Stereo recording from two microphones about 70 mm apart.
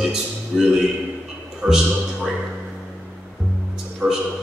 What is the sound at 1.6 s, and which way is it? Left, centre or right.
Speech, centre.